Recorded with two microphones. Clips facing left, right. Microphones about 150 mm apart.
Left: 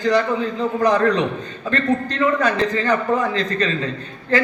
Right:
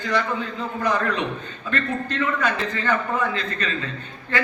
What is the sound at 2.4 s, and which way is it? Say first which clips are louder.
A man's voice: left 6 dB; 40° left (ahead or behind).